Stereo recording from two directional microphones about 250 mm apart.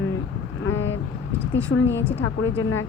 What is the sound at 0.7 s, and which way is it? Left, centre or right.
A woman's voice, left.